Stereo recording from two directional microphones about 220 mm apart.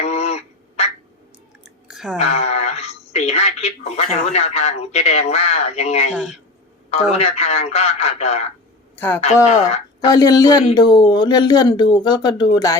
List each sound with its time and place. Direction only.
0.0 s quack: 30° left (ahead or behind)
1.6 s chewing: 5° right (ahead or behind)
2.1 s speech: 30° left (ahead or behind)
9.0 s speech: 10° left (ahead or behind)
9.2 s speech: 30° left (ahead or behind)
10.1 s speech: 15° left (ahead or behind)